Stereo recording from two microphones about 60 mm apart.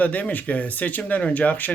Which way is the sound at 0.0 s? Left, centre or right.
Left.